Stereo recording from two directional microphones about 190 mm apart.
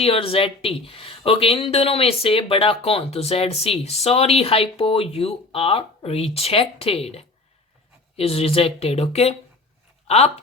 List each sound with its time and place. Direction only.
0.0 s speech: 30° left (ahead or behind)